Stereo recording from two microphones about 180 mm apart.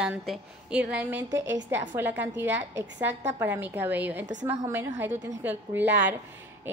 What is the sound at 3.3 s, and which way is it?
A woman's voice, 10° right (ahead or behind).